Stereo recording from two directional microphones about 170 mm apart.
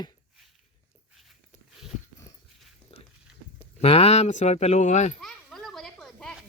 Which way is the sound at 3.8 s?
35° left (ahead or behind).